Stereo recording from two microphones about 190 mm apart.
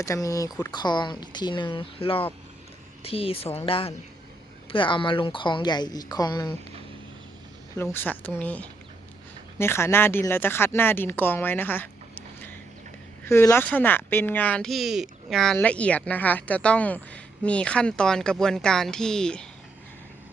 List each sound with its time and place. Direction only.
0.0 s speech: 15° left (ahead or behind)
7.8 s speech: 10° left (ahead or behind)